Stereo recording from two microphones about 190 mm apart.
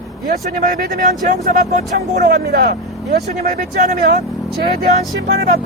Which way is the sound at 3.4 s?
50° right (ahead or behind).